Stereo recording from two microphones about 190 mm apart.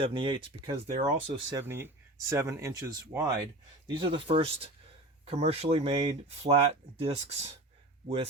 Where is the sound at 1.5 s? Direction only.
10° right (ahead or behind).